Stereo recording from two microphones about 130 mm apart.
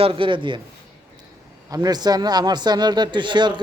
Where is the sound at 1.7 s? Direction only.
30° right (ahead or behind).